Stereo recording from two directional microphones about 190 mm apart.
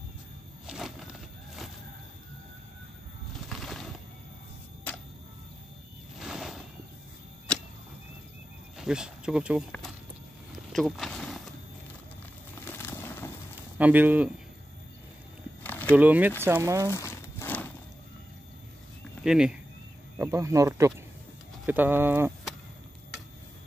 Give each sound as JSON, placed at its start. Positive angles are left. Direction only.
{"t": 0.7, "sound": "a sound", "side_deg": 0}
{"t": 3.4, "sound": "a sound", "side_deg": 0}
{"t": 6.1, "sound": "a sound", "side_deg": -5}
{"t": 8.7, "sound": "speech", "side_deg": -5}
{"t": 10.7, "sound": "vehicle", "side_deg": 0}
{"t": 12.6, "sound": "a sound", "side_deg": 10}
{"t": 13.7, "sound": "speech", "side_deg": -10}
{"t": 15.6, "sound": "walk", "side_deg": 10}
{"t": 16.0, "sound": "speech", "side_deg": -10}
{"t": 16.9, "sound": "crumpling", "side_deg": 15}
{"t": 19.2, "sound": "speech", "side_deg": -5}
{"t": 20.2, "sound": "speech", "side_deg": -15}